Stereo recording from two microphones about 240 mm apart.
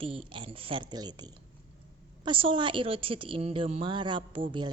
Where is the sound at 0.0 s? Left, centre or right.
Right.